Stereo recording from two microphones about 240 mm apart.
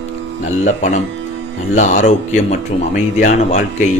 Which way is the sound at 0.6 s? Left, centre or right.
Left.